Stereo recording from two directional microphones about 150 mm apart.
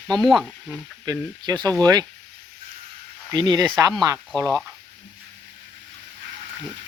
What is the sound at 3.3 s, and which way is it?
Speech, 30° right (ahead or behind).